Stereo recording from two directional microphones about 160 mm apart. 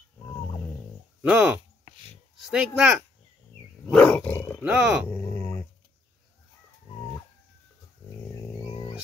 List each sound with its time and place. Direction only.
1.2 s speech: 5° right (ahead or behind)
3.9 s roar: 10° left (ahead or behind)
4.6 s speech: 5° right (ahead or behind)
5.1 s dog: 10° left (ahead or behind)
8.6 s a sound: 30° left (ahead or behind)